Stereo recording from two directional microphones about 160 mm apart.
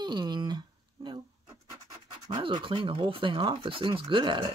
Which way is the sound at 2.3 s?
30° right (ahead or behind).